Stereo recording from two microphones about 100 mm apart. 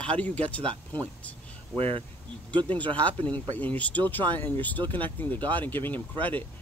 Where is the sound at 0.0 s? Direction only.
15° left (ahead or behind).